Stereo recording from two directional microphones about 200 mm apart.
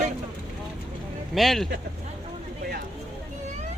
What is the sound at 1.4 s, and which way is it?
Speech, centre (ahead or behind).